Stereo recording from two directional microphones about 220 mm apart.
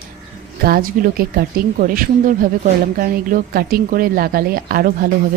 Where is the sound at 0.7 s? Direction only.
40° right (ahead or behind).